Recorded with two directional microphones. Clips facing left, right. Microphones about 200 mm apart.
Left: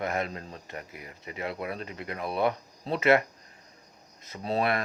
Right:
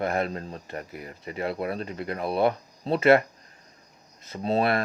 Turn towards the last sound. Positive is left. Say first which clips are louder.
# right 4 dB
turn(degrees=-30)  # may be behind; listen again after turning